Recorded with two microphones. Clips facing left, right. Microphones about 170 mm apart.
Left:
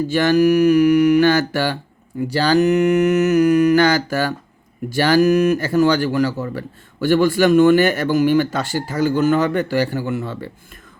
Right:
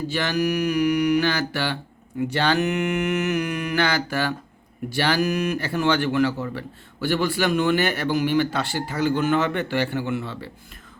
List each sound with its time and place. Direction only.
0.1 s speech: 50° left (ahead or behind)
2.2 s mantra: 35° left (ahead or behind)
4.9 s speech: 45° left (ahead or behind)